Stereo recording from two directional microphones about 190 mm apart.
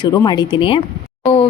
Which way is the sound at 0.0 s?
20° left (ahead or behind).